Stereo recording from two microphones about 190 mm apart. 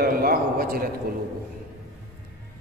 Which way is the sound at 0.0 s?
50° right (ahead or behind).